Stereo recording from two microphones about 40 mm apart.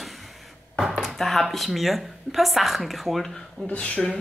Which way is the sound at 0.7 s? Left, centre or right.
Centre.